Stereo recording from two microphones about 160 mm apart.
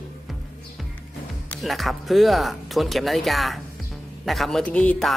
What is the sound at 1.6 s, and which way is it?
Speech, centre (ahead or behind).